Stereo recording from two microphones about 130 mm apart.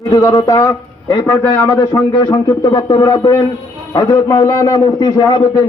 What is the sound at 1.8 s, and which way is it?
A man's voice, 35° left (ahead or behind).